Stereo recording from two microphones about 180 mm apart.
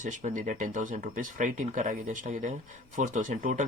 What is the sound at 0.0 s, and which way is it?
Speech, 40° right (ahead or behind).